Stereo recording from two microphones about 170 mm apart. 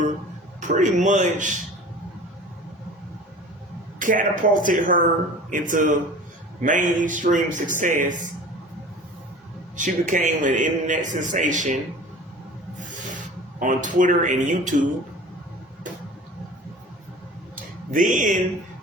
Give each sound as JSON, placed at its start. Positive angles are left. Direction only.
{"t": 0.6, "sound": "speech", "side_deg": -45}
{"t": 4.0, "sound": "speech", "side_deg": -50}
{"t": 9.7, "sound": "speech", "side_deg": -50}
{"t": 13.6, "sound": "speech", "side_deg": -50}
{"t": 17.9, "sound": "speech", "side_deg": -50}